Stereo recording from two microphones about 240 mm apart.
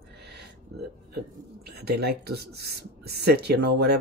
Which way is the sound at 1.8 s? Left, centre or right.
Right.